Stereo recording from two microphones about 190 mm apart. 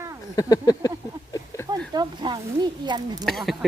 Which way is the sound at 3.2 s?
Centre (ahead or behind).